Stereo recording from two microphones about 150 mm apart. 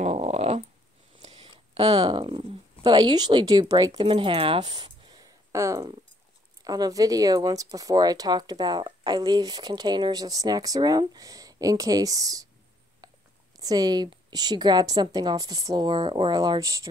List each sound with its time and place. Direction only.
0.0 s dog: 45° right (ahead or behind)
1.2 s speech: 40° right (ahead or behind)
4.1 s speech: 35° right (ahead or behind)
13.0 s whispering: 25° right (ahead or behind)
13.6 s speech: 25° right (ahead or behind)